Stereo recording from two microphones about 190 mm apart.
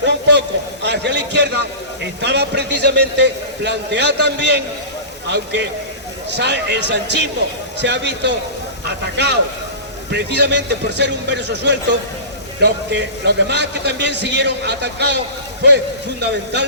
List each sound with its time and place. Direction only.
0.0 s a man's voice: 65° right (ahead or behind)
16.2 s a man's voice: 65° right (ahead or behind)